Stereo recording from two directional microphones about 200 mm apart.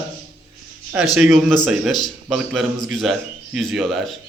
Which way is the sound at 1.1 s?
5° right (ahead or behind).